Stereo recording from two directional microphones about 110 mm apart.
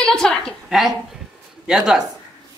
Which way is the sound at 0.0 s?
5° left (ahead or behind).